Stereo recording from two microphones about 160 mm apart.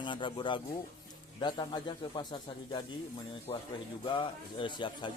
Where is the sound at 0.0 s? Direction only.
30° left (ahead or behind).